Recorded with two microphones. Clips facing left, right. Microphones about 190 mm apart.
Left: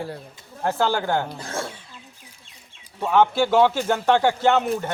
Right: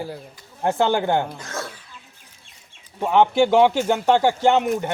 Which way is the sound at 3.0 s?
15° right (ahead or behind).